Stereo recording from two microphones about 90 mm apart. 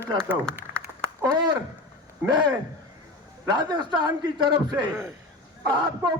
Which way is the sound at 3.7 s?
50° right (ahead or behind).